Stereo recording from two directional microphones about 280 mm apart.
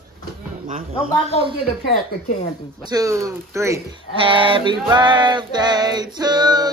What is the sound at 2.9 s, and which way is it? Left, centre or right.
Speech, centre.